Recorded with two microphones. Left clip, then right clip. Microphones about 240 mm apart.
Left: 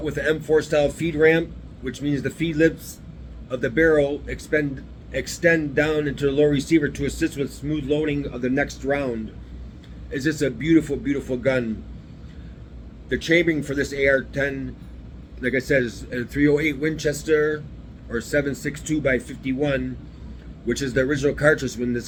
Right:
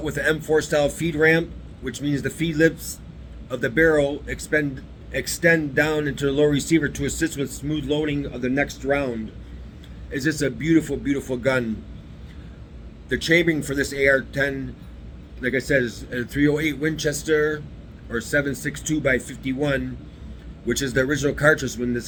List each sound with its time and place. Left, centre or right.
0.0 s speech: right
13.1 s speech: right